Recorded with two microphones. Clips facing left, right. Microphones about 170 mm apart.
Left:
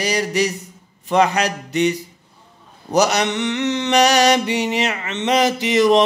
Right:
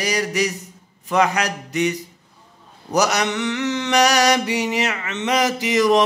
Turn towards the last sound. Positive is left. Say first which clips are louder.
# left 2 dB
turn(degrees=30)  # may be behind; listen again after turning